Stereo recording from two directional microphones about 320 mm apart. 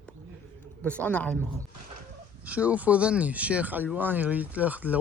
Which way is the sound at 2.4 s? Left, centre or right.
Centre.